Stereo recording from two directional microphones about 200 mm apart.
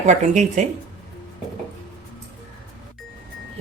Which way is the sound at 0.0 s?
35° right (ahead or behind).